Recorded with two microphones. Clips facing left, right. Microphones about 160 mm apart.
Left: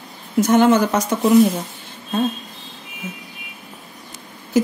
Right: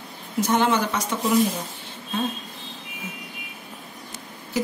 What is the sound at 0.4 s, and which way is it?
Speech, 50° left (ahead or behind).